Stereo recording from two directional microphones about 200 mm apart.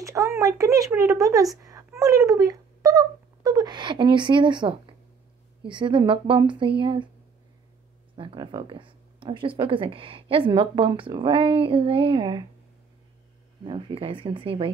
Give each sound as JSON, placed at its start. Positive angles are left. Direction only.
{"t": 0.0, "sound": "speech", "side_deg": -15}
{"t": 1.6, "sound": "a sound", "side_deg": -15}
{"t": 5.6, "sound": "speech", "side_deg": -25}
{"t": 8.2, "sound": "speech", "side_deg": -25}
{"t": 13.7, "sound": "speech", "side_deg": -25}